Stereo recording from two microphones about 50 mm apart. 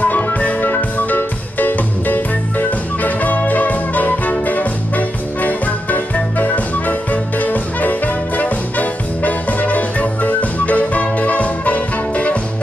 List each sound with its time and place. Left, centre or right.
0.0 s music: left